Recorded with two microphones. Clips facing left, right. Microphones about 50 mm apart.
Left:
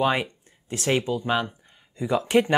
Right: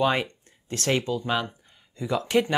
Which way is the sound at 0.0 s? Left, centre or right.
Centre.